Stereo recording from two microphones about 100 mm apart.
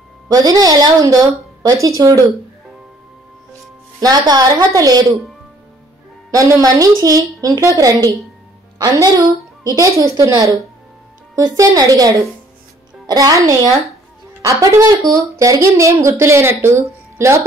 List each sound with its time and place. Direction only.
0.3 s speech: 40° right (ahead or behind)
4.0 s speech: 40° right (ahead or behind)
6.3 s speech: 35° right (ahead or behind)